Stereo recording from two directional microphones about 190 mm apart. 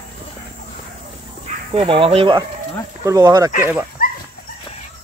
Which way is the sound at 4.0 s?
50° left (ahead or behind).